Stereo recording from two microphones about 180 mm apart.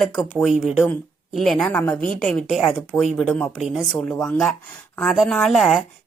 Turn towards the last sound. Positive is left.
turn(degrees=0)  # may be behind; listen again after turning